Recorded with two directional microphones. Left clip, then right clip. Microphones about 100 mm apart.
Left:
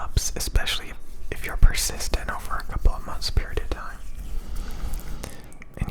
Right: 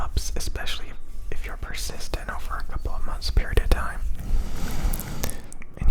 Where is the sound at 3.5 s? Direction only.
35° right (ahead or behind).